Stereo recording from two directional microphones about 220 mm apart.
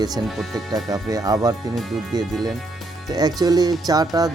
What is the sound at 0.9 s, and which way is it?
Speech, 15° right (ahead or behind).